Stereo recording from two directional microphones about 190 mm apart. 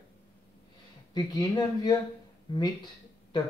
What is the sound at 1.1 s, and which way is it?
Speech, 20° left (ahead or behind).